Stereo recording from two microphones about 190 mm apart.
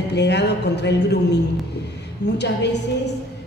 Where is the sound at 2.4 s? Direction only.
65° left (ahead or behind).